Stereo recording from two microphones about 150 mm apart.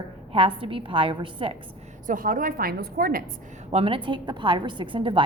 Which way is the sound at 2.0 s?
65° right (ahead or behind).